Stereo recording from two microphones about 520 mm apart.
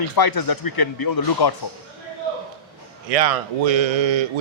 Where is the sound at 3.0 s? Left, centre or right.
Right.